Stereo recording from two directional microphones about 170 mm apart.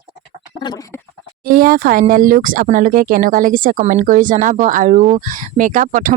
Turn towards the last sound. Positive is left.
turn(degrees=-50)  # may be behind; listen again after turning